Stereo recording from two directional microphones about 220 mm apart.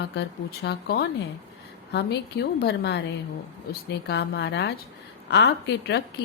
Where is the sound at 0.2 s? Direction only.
50° left (ahead or behind).